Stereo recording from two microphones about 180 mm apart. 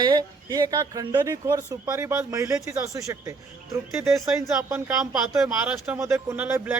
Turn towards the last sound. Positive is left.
turn(degrees=-10)  # may be behind; listen again after turning